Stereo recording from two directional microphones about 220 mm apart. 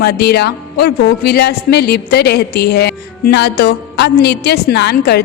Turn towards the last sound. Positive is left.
turn(degrees=45)  # may be behind; listen again after turning